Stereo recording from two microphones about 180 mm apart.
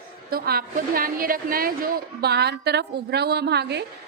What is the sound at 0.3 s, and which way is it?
A woman's voice, 55° right (ahead or behind).